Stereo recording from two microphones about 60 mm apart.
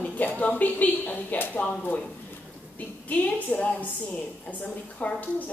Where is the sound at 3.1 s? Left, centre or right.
Left.